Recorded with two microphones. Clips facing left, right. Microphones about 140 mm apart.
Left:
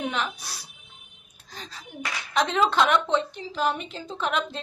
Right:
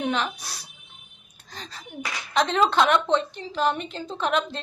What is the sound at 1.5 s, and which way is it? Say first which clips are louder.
A woman's voice: right 1 dB; 5° left (ahead or behind).